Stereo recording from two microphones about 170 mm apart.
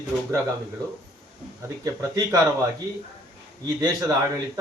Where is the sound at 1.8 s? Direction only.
20° right (ahead or behind).